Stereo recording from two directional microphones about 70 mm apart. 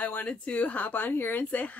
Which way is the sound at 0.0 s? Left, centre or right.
Left.